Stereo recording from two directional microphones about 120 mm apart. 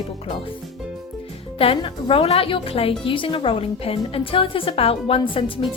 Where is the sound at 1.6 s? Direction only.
50° left (ahead or behind).